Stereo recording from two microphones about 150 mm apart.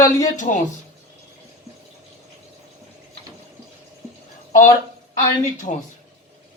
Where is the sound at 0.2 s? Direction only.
55° left (ahead or behind).